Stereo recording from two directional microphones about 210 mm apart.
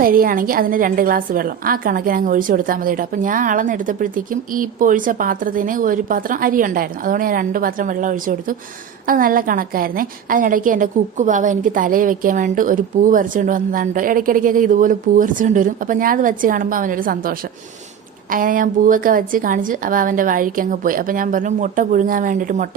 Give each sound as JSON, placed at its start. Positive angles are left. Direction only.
{"t": 0.0, "sound": "a woman's voice", "side_deg": -45}